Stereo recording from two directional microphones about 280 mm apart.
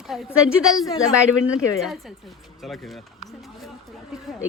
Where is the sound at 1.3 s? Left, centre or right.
Left.